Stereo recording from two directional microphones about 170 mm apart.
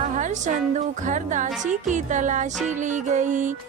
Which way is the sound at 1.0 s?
45° right (ahead or behind).